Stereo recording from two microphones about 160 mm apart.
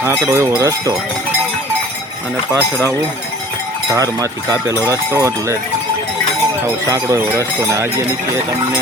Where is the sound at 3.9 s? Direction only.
20° right (ahead or behind).